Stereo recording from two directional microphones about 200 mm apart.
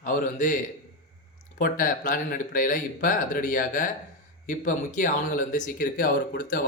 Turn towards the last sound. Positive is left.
turn(degrees=45)  # may be behind; listen again after turning